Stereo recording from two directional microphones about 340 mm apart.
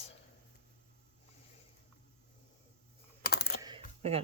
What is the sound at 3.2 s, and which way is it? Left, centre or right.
Computer keyboard, left.